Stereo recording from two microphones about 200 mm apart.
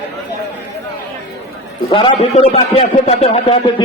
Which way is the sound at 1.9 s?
25° left (ahead or behind).